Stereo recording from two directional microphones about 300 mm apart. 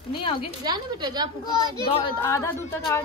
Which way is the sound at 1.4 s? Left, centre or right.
Centre.